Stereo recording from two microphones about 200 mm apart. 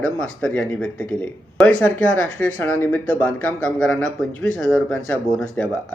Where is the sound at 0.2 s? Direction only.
5° left (ahead or behind).